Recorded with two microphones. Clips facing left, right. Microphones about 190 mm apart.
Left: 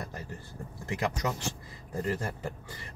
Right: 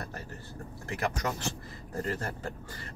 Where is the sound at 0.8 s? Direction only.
15° left (ahead or behind).